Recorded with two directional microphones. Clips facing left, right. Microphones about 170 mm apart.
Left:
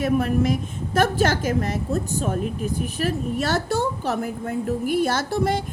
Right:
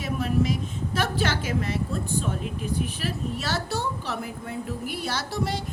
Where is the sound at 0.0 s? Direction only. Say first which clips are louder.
Left 5 dB; 55° left (ahead or behind).